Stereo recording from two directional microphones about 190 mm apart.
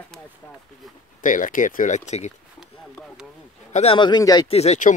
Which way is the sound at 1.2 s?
45° left (ahead or behind).